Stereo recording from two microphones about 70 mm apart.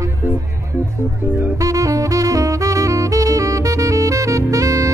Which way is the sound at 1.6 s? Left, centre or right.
Right.